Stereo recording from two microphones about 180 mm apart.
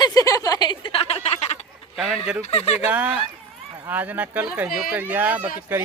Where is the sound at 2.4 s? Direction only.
35° left (ahead or behind).